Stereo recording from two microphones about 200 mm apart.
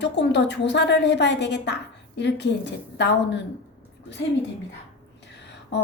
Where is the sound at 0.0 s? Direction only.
60° left (ahead or behind).